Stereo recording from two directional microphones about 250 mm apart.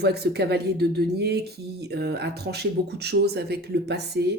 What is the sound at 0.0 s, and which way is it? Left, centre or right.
Speech, right.